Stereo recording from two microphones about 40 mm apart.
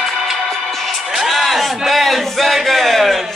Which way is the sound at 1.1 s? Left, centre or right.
Centre.